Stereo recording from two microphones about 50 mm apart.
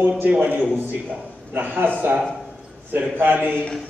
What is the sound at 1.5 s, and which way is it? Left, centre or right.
Speech, right.